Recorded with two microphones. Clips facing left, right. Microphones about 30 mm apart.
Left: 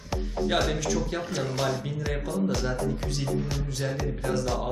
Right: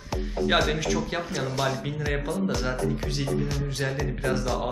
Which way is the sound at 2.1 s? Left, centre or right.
Right.